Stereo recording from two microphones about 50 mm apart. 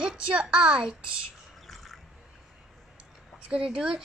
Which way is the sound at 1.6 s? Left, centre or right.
Centre.